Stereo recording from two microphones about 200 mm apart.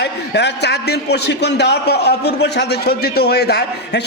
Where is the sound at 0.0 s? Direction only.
60° left (ahead or behind).